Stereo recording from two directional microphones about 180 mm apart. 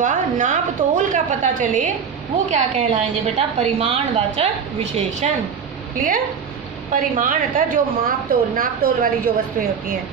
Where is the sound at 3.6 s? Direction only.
35° right (ahead or behind).